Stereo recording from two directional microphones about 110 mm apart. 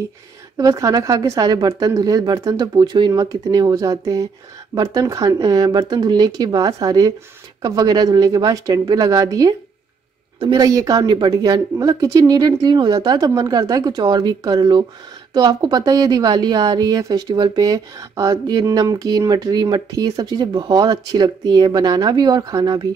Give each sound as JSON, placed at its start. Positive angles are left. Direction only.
{"t": 0.6, "sound": "a woman's voice", "side_deg": -30}
{"t": 3.1, "sound": "a woman's voice", "side_deg": -30}